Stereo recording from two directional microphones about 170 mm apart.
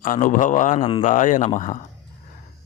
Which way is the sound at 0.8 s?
30° left (ahead or behind).